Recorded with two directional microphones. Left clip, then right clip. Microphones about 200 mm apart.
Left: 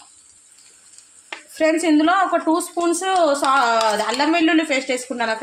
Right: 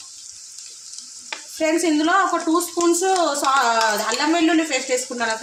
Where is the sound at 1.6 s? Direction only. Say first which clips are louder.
Left 3 dB; 50° left (ahead or behind).